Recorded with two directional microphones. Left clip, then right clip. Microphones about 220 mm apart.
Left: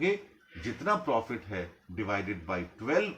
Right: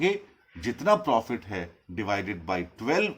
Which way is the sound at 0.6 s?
50° right (ahead or behind).